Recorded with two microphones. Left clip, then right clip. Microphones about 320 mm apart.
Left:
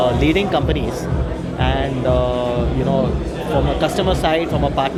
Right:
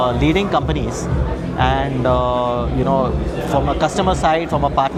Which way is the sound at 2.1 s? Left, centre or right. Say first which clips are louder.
Right 2 dB; right.